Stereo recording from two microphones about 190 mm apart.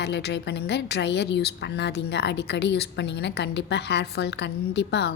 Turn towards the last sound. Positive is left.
turn(degrees=60)  # may be behind; listen again after turning